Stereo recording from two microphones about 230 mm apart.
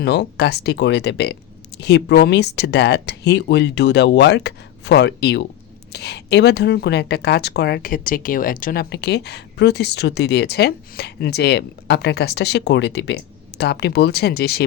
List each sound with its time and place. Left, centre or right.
0.0 s speech: left